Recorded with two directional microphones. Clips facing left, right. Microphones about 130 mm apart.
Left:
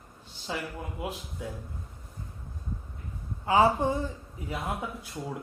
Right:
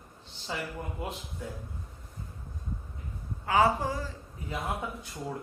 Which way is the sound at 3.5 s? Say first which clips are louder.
Left 2 dB; 25° left (ahead or behind).